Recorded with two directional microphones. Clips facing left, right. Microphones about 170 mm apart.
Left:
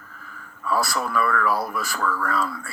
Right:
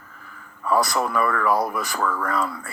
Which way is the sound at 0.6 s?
20° right (ahead or behind).